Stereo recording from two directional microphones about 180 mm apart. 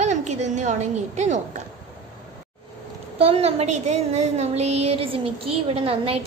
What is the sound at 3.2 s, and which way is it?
A woman's voice, 35° right (ahead or behind).